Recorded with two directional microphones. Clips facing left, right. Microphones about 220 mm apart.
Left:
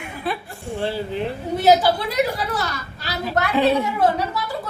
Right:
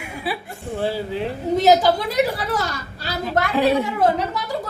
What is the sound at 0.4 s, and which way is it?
Speech, 20° right (ahead or behind).